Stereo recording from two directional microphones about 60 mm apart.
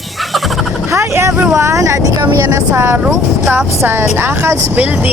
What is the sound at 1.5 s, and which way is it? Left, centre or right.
Speech, right.